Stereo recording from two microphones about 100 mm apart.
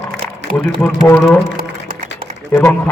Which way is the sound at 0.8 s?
10° left (ahead or behind).